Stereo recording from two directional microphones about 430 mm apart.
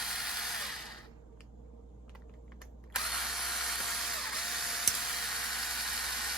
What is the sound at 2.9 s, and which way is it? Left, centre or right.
Drill, centre.